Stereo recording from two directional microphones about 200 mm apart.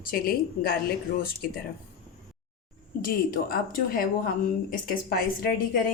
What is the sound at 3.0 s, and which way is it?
A woman's voice, 45° left (ahead or behind).